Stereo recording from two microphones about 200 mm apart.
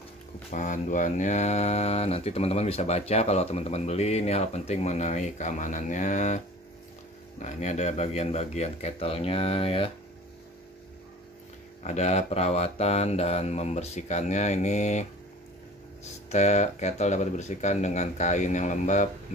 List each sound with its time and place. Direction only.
0.5 s speech: 40° left (ahead or behind)
11.8 s speech: 35° left (ahead or behind)